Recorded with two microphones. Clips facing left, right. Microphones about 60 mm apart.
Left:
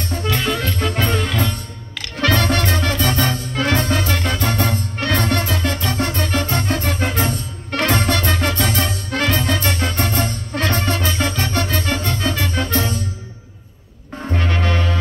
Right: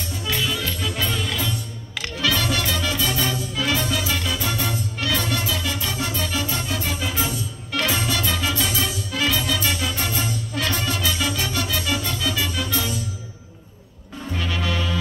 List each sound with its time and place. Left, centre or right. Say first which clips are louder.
0.0 s music: left 5 dB; left
14.1 s music: left 5 dB; left